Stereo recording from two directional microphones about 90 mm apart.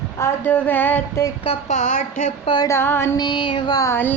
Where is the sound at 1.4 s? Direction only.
90° left.